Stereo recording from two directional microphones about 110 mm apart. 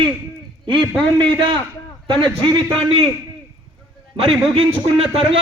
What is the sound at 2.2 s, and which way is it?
Speech, 45° right (ahead or behind).